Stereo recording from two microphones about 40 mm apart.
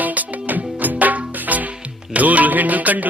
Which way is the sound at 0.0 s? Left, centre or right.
Right.